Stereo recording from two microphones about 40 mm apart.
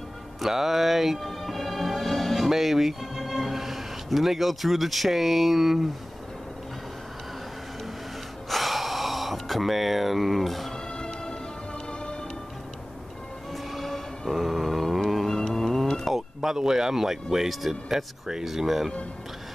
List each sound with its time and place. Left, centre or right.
0.4 s speech: centre
8.5 s gasp: centre
11.0 s music: centre
13.7 s music: centre
15.2 s a sound: centre
16.1 s speech: centre